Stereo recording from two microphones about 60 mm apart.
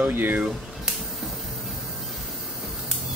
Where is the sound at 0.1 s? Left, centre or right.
Right.